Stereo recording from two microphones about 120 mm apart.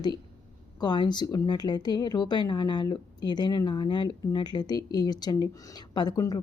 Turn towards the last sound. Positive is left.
turn(degrees=35)  # may be behind; listen again after turning